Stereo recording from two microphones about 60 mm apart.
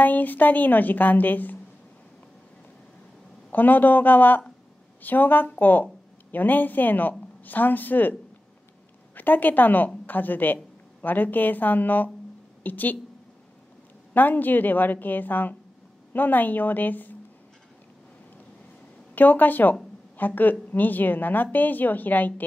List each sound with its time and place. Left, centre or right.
0.0 s a woman's voice: left
3.5 s a woman's voice: left
14.1 s speech: left
19.1 s speech: left